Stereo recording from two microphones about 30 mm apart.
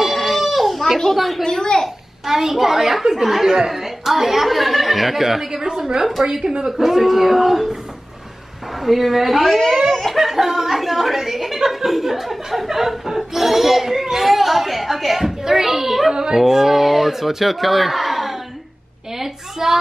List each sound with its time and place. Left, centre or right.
0.0 s goat: centre
1.1 s speech: centre
1.4 s a sound: centre
2.2 s speech: centre
3.5 s speech: centre
5.5 s a woman's voice: centre
6.9 s speech: centre
8.8 s speech: centre
16.1 s a woman's voice: right
16.3 s speech: centre